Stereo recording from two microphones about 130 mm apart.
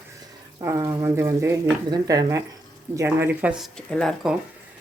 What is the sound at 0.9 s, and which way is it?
Speech, 20° right (ahead or behind).